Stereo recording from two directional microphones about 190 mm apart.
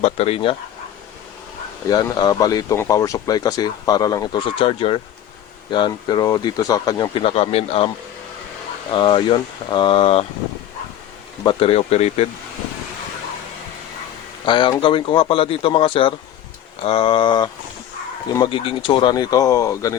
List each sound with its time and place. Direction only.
0.0 s speech: 30° left (ahead or behind)
1.9 s speech: 20° left (ahead or behind)
8.9 s speech: 25° left (ahead or behind)
11.4 s speech: 30° left (ahead or behind)
14.4 s speech: 25° left (ahead or behind)